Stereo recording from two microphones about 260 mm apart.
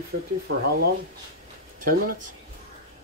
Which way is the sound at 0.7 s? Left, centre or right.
Right.